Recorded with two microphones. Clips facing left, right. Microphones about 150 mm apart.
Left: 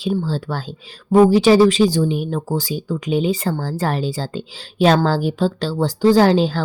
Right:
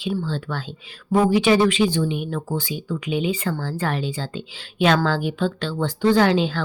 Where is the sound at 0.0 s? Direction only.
35° left (ahead or behind).